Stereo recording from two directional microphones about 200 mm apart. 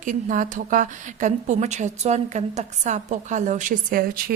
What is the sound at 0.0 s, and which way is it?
A woman's voice, 40° right (ahead or behind).